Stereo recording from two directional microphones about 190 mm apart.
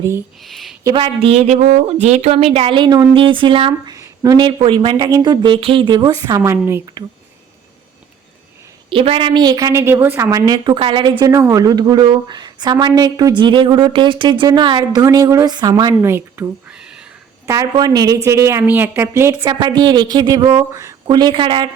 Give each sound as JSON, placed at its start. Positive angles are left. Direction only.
{"t": 0.4, "sound": "a sound", "side_deg": 0}
{"t": 0.9, "sound": "a woman's voice", "side_deg": -25}
{"t": 8.9, "sound": "a woman's voice", "side_deg": -25}
{"t": 17.4, "sound": "a woman's voice", "side_deg": -15}